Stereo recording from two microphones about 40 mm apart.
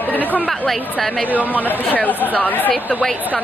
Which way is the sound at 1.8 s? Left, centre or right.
Left.